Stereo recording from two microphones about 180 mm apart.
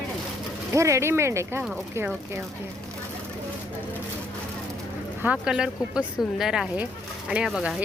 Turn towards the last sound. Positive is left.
turn(degrees=-5)  # may be behind; listen again after turning